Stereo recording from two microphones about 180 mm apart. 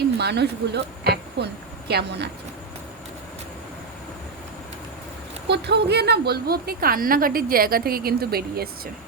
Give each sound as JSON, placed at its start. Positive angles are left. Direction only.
{"t": 0.2, "sound": "a woman's voice", "side_deg": -65}
{"t": 5.5, "sound": "a woman's voice", "side_deg": -70}